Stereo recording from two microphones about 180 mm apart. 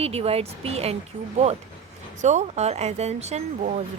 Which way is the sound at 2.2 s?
40° right (ahead or behind).